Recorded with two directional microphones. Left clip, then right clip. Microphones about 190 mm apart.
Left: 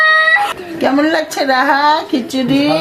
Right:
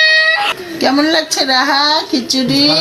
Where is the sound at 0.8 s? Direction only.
40° left (ahead or behind).